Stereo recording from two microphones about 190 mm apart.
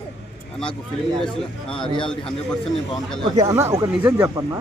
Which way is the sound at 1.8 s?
25° left (ahead or behind).